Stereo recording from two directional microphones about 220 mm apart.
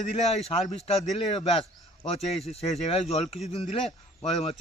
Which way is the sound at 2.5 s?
30° left (ahead or behind).